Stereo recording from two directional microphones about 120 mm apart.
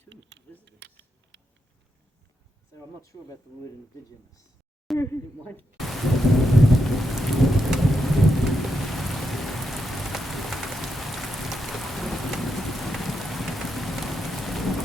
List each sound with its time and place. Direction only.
2.7 s speech: 25° left (ahead or behind)
4.9 s speech: 20° left (ahead or behind)
5.7 s thunder: centre (ahead or behind)